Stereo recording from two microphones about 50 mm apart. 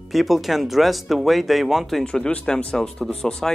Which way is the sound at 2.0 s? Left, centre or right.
Centre.